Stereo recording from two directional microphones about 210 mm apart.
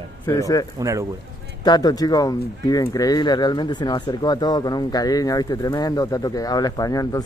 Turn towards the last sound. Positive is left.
turn(degrees=15)  # may be behind; listen again after turning